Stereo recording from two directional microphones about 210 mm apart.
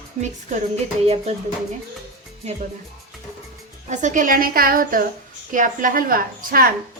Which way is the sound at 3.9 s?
35° right (ahead or behind).